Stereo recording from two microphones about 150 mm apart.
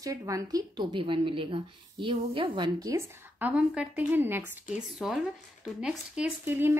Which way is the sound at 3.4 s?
10° right (ahead or behind).